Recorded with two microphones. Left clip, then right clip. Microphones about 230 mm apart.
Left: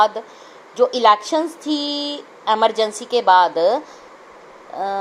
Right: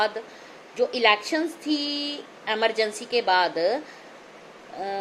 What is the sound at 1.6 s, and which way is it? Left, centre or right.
Female singing, left.